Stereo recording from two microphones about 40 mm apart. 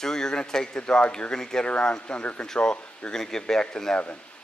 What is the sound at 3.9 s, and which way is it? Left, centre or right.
Speech, left.